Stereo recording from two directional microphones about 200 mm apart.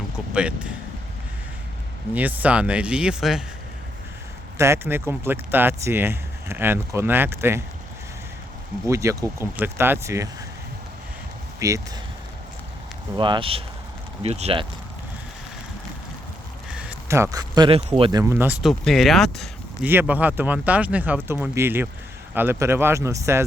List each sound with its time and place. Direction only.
0.3 s speech: 5° right (ahead or behind)
2.1 s speech: 10° right (ahead or behind)
4.5 s speech: 15° right (ahead or behind)
8.9 s speech: 15° right (ahead or behind)
11.6 s speech: 15° right (ahead or behind)
13.1 s speech: 25° right (ahead or behind)
16.6 s a sound: 5° right (ahead or behind)
17.3 s speech: 20° right (ahead or behind)
18.2 s speech: 10° right (ahead or behind)
18.7 s speech: centre (ahead or behind)
19.9 s speech: 10° right (ahead or behind)